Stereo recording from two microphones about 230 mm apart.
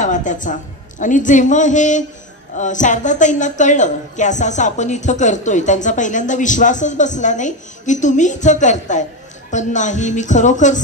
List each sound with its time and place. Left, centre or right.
0.0 s a woman's voice: left